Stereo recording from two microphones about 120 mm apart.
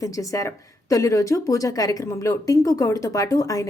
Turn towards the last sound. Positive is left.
turn(degrees=30)  # may be behind; listen again after turning